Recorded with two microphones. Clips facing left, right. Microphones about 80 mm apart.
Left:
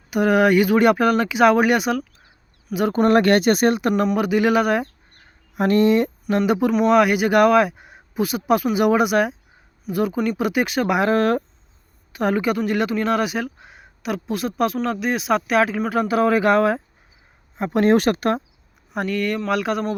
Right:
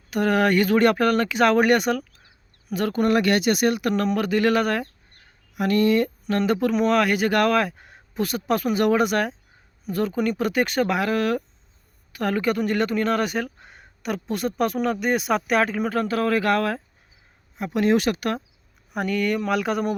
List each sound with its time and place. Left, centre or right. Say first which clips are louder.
0.1 s speech: left 4 dB; centre
2.9 s speech: left 5 dB; left
3.8 s speech: left 3 dB; left
4.0 s speech: left 2 dB; centre
5.5 s speech: left 3 dB; left; by 10.9 s centre
11.1 s speech: left 4 dB; left
12.1 s speech: left 3 dB; centre
17.7 s speech: left 4 dB; left
18.9 s speech: left 1 dB; centre